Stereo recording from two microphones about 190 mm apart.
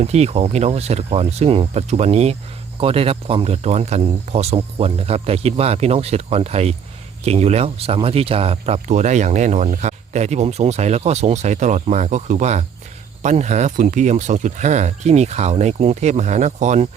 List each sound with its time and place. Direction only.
0.0 s speech: 35° right (ahead or behind)